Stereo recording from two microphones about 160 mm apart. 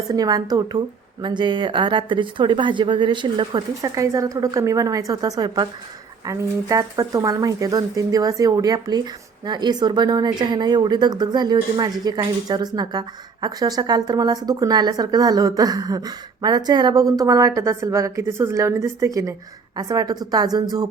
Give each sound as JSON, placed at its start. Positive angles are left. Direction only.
{"t": 0.1, "sound": "speech", "side_deg": -25}